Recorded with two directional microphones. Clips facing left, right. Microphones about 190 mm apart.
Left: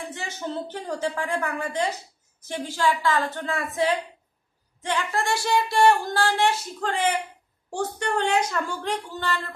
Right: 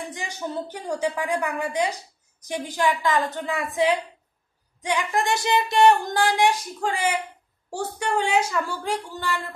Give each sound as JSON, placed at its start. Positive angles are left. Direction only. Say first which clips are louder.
{"t": 0.1, "sound": "speech", "louder": "right 1 dB", "side_deg": -15}